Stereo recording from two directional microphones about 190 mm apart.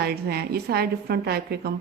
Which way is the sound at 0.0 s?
55° right (ahead or behind).